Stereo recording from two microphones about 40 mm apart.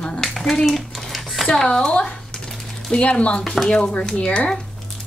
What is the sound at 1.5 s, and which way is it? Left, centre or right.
Speech, centre.